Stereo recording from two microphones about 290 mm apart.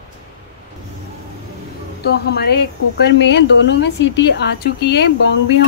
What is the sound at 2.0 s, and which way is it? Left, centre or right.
Speech, left.